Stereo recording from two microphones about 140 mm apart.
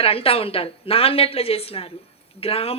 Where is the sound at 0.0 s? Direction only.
45° left (ahead or behind).